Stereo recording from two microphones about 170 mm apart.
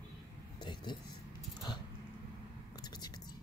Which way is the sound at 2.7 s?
25° left (ahead or behind).